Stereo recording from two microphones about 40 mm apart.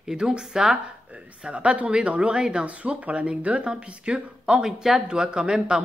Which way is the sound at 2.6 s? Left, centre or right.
Right.